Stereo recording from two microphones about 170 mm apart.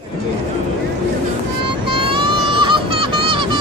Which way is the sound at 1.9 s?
30° right (ahead or behind).